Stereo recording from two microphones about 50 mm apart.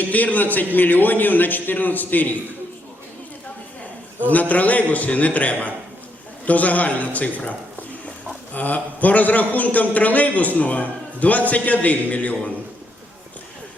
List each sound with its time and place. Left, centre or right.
0.0 s a man's voice: left
4.3 s a man's voice: left
8.5 s a man's voice: left